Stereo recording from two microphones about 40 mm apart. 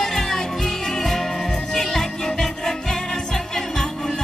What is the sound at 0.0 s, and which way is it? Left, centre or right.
Music, centre.